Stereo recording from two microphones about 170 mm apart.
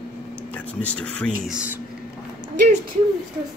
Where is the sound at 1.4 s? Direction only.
10° right (ahead or behind).